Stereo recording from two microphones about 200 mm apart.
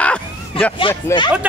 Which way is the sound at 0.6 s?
25° left (ahead or behind).